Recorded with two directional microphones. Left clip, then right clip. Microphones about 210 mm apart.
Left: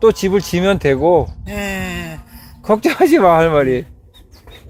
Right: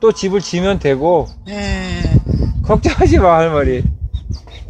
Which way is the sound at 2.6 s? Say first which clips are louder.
Left 1 dB; 45° left (ahead or behind).